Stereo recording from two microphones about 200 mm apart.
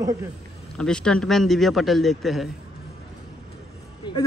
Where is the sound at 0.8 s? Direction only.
5° left (ahead or behind).